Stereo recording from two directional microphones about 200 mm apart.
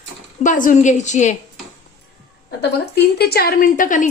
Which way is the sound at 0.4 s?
40° left (ahead or behind).